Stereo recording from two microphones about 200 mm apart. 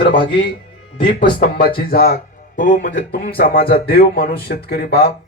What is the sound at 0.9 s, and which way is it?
Speech, 45° left (ahead or behind).